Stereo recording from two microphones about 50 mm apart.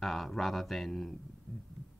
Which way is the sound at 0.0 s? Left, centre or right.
Centre.